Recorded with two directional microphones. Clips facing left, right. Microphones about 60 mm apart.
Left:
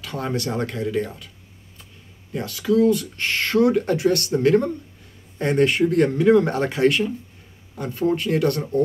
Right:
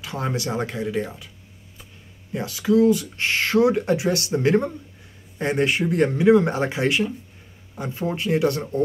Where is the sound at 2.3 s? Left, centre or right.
Centre.